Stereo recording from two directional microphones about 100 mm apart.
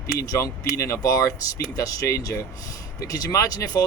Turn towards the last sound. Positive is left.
turn(degrees=35)  # may be behind; listen again after turning